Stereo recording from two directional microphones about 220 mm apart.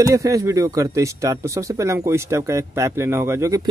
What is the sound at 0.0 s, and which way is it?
Speech, 15° right (ahead or behind).